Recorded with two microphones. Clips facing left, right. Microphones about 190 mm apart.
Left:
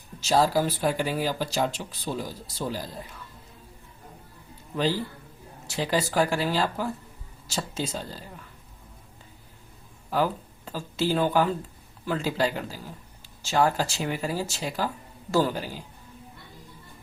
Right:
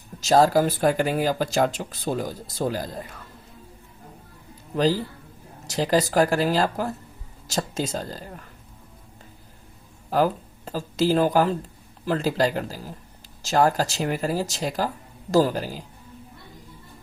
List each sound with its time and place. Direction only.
0.2 s speech: 45° right (ahead or behind)
4.7 s speech: 40° right (ahead or behind)
10.1 s speech: 40° right (ahead or behind)